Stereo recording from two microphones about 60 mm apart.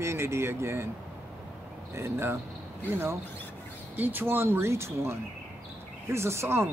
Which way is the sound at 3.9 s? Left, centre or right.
Right.